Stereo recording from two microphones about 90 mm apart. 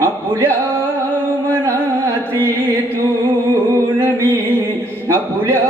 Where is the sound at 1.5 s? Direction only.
30° right (ahead or behind).